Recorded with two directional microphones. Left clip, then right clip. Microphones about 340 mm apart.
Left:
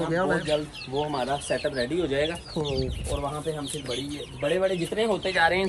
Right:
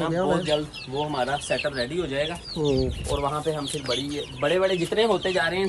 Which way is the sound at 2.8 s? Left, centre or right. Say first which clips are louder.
Right 4 dB; right.